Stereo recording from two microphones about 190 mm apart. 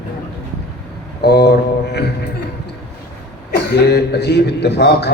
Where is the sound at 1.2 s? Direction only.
60° left (ahead or behind).